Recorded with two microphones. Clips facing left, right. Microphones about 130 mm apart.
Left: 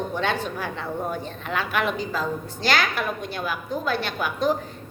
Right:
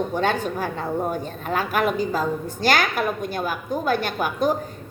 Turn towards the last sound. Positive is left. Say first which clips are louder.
# right 2 dB
turn(degrees=-45)  # may be behind; listen again after turning